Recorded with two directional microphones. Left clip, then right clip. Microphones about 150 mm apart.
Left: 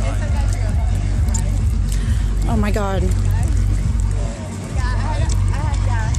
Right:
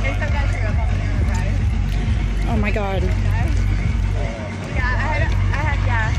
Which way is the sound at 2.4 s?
30° left (ahead or behind).